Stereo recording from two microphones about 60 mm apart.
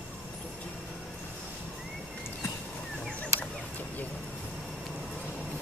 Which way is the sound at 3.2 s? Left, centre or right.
Left.